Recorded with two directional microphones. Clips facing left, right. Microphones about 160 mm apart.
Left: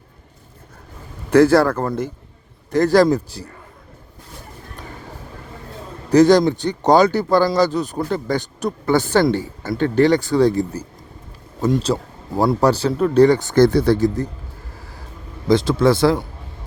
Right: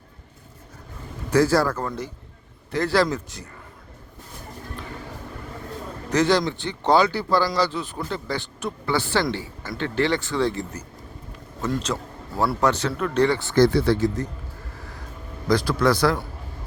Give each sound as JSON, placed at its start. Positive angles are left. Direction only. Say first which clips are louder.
{"t": 1.3, "sound": "speech", "louder": "left 7 dB", "side_deg": 60}
{"t": 1.8, "sound": "speech", "louder": "left 7 dB", "side_deg": 40}
{"t": 6.1, "sound": "speech", "louder": "left 8 dB", "side_deg": 40}
{"t": 11.9, "sound": "a man's voice", "louder": "left 7 dB", "side_deg": 30}
{"t": 15.4, "sound": "a man's voice", "louder": "left 5 dB", "side_deg": 25}